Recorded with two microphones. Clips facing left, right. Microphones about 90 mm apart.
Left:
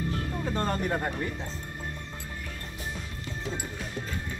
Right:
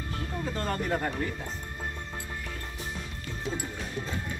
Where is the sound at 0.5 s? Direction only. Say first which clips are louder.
Left 1 dB; 20° left (ahead or behind).